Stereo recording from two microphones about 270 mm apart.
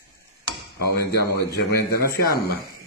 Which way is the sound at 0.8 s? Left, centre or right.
Left.